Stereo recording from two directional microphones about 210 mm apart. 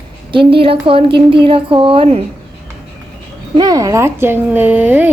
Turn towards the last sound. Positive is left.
turn(degrees=-10)  # may be behind; listen again after turning